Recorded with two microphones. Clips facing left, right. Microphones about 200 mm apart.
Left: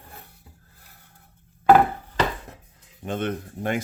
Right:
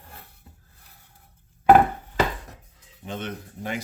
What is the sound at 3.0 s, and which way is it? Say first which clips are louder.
Speech: left 6 dB; 55° left (ahead or behind).